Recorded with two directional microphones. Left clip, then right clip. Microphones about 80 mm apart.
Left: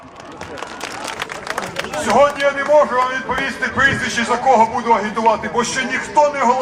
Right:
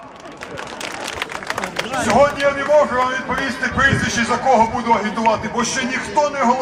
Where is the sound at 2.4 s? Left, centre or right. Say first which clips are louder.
Left 1 dB; centre.